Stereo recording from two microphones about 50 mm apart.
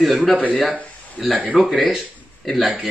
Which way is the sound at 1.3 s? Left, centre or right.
Right.